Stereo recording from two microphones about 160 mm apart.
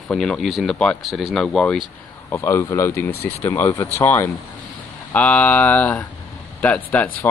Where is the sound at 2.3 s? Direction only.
15° left (ahead or behind).